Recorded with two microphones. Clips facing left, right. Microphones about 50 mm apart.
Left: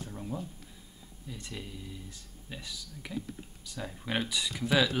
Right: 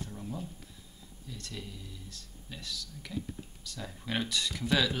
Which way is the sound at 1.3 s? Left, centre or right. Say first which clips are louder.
Left 1 dB; centre.